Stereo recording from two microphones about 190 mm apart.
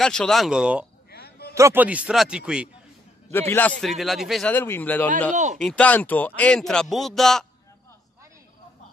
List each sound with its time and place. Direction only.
0.0 s speech: 5° left (ahead or behind)
1.1 s a sound: 55° left (ahead or behind)
1.5 s speech: 15° right (ahead or behind)
3.3 s a man's voice: 10° left (ahead or behind)
3.8 s speech: centre (ahead or behind)
5.3 s speech: 40° right (ahead or behind)
5.6 s speech: 5° left (ahead or behind)